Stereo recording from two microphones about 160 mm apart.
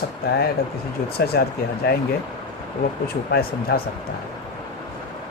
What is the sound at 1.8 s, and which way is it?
Speech, 90° left.